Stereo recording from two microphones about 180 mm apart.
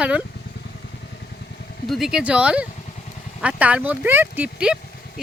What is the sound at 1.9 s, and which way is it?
Speech, 5° right (ahead or behind).